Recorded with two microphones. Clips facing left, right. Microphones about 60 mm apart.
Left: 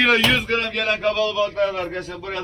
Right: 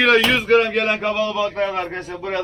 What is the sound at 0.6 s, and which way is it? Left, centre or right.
A man's voice, centre.